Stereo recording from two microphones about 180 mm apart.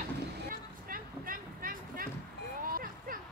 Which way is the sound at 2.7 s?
50° right (ahead or behind).